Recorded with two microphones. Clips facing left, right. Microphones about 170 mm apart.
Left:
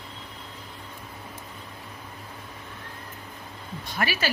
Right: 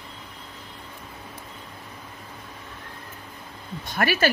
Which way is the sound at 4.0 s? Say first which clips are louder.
Right 5 dB; 55° right (ahead or behind).